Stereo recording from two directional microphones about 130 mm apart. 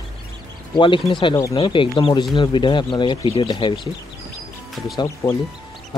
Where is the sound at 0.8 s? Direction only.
40° left (ahead or behind).